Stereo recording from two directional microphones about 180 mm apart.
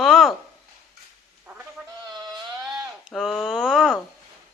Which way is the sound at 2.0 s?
20° right (ahead or behind).